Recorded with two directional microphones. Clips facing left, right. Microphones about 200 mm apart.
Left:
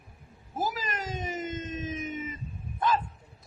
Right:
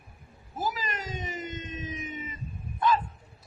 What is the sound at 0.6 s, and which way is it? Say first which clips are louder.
Cat: left 1 dB; 45° left (ahead or behind).